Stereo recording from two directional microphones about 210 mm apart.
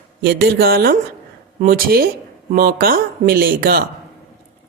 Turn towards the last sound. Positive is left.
turn(degrees=-45)  # may be behind; listen again after turning